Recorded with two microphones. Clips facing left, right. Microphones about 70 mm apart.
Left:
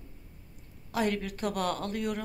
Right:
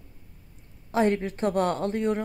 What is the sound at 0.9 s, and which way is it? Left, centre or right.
A woman's voice, right.